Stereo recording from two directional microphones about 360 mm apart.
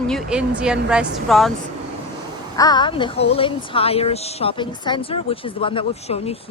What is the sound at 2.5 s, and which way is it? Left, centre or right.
Speech, centre.